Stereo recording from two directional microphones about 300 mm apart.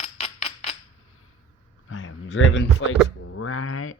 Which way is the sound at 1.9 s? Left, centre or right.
Left.